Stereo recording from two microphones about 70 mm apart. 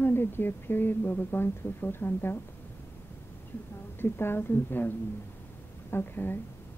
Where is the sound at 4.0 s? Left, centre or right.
Left.